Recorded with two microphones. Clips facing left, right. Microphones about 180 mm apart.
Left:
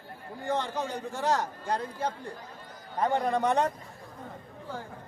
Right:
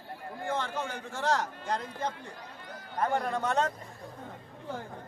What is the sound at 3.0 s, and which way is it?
Speech, 15° left (ahead or behind).